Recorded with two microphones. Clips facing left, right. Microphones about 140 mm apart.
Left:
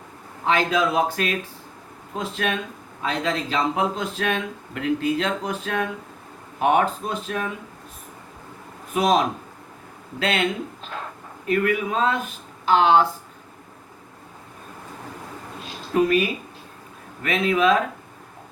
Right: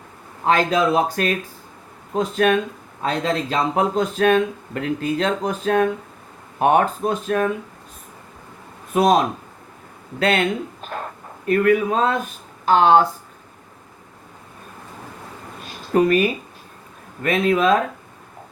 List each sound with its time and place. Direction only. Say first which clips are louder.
0.4 s speech: right 3 dB; 40° right (ahead or behind)
9.0 s a man's voice: right 3 dB; 45° right (ahead or behind)
16.0 s speech: right 3 dB; 50° right (ahead or behind)
17.2 s speech: right 2 dB; 40° right (ahead or behind)